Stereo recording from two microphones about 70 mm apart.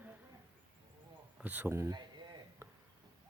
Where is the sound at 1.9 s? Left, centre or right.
Right.